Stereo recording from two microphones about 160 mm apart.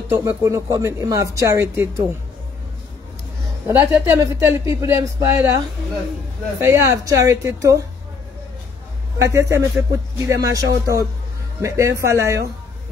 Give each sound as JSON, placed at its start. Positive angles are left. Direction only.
{"t": 0.1, "sound": "speech", "side_deg": -20}
{"t": 3.6, "sound": "speech", "side_deg": -15}
{"t": 6.6, "sound": "speech", "side_deg": -15}
{"t": 9.2, "sound": "speech", "side_deg": -20}